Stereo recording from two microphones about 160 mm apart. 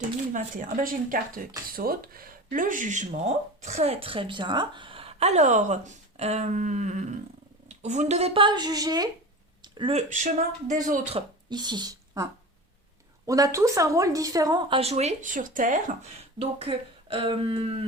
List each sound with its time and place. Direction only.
0.3 s speech: 60° right (ahead or behind)
11.1 s speech: 25° right (ahead or behind); by 16.0 s 55° right (ahead or behind)
16.4 s speech: 35° right (ahead or behind)